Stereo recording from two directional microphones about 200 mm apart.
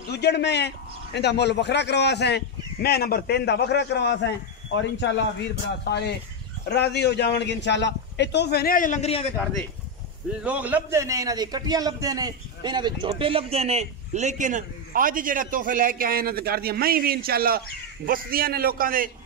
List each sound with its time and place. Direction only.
0.1 s a man's voice: 55° left (ahead or behind); by 9.2 s 35° left (ahead or behind)
10.4 s a man's voice: 5° right (ahead or behind); by 19.0 s 45° right (ahead or behind)